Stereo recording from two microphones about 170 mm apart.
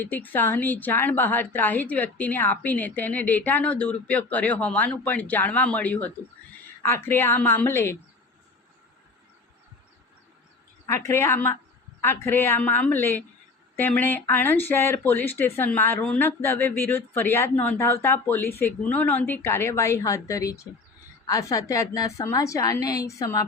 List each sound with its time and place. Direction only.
0.0 s speech: 10° left (ahead or behind)
10.8 s a woman's voice: 15° left (ahead or behind)